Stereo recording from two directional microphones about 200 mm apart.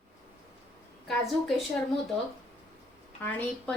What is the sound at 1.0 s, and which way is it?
Speech, centre (ahead or behind).